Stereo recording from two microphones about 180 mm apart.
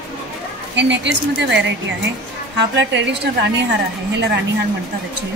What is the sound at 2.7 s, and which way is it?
Speech, 75° right (ahead or behind).